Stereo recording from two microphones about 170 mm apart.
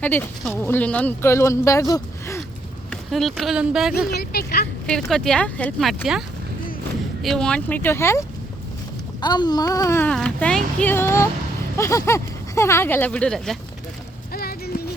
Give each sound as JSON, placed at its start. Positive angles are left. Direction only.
{"t": 0.0, "sound": "speech", "side_deg": 10}
{"t": 2.9, "sound": "speech", "side_deg": 0}
{"t": 4.1, "sound": "speech", "side_deg": 70}
{"t": 4.9, "sound": "speech", "side_deg": 5}
{"t": 7.2, "sound": "speech", "side_deg": 0}
{"t": 9.2, "sound": "speech", "side_deg": 25}
{"t": 14.3, "sound": "a sound", "side_deg": 65}